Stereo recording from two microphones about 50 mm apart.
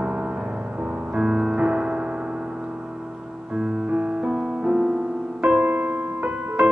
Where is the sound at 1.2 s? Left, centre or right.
Centre.